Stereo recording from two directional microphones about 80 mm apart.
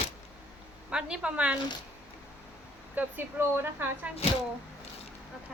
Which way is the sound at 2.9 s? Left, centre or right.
Right.